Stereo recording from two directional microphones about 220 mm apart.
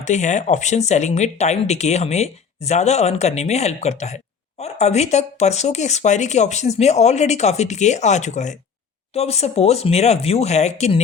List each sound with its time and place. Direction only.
0.0 s speech: 35° left (ahead or behind)